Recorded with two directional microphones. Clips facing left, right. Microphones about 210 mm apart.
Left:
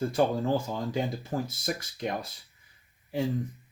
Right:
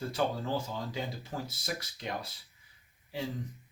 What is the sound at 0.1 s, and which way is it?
Speech, 50° left (ahead or behind).